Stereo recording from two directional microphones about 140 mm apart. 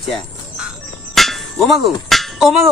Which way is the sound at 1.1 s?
Centre (ahead or behind).